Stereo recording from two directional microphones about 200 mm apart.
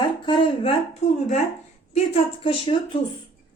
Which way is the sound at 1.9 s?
30° left (ahead or behind).